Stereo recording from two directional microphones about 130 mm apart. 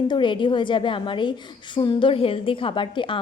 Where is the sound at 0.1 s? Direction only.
40° left (ahead or behind).